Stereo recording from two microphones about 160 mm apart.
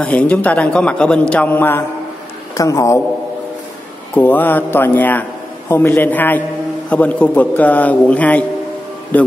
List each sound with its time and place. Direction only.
0.0 s a man's voice: 10° left (ahead or behind)
4.1 s a man's voice: 10° left (ahead or behind)